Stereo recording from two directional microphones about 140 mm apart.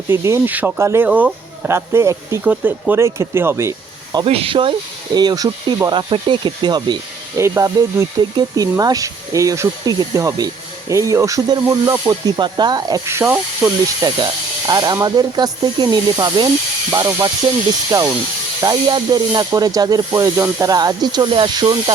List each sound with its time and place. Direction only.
0.1 s speech: 20° right (ahead or behind)
4.3 s speech: 40° right (ahead or behind)
5.1 s speech: 30° right (ahead or behind)
7.3 s speech: 20° right (ahead or behind)